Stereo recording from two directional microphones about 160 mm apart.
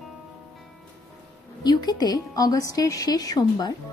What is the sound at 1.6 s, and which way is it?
A woman's voice, 25° left (ahead or behind).